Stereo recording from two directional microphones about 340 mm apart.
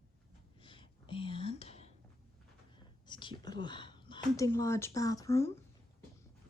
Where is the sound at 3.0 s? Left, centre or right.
Centre.